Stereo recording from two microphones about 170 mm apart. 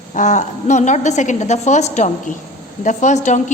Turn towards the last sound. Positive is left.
turn(degrees=45)  # may be behind; listen again after turning